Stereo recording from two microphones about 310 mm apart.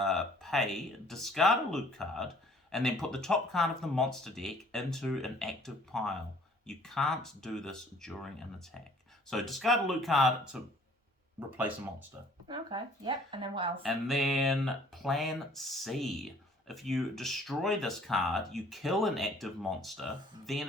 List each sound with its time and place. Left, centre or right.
0.0 s speech: centre
13.8 s speech: centre